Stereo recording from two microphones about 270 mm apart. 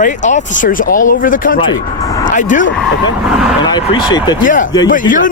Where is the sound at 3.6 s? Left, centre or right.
Centre.